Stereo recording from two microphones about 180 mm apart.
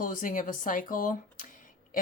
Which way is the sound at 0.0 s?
45° left (ahead or behind).